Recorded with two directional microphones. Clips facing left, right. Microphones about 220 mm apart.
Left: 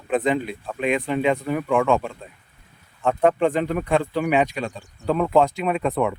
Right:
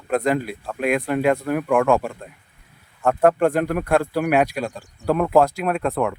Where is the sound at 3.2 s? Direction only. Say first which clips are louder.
Right 2 dB; 5° right (ahead or behind).